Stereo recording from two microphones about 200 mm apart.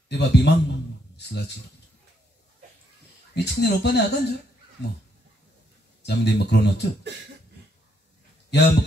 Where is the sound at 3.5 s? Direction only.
55° left (ahead or behind).